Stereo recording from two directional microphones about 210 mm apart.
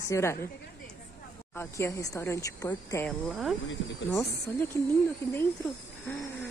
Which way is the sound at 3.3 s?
Centre (ahead or behind).